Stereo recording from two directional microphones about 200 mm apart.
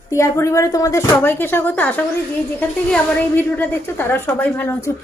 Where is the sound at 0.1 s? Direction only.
15° left (ahead or behind).